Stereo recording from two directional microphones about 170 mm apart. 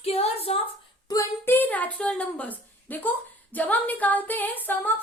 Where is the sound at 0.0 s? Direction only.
35° left (ahead or behind).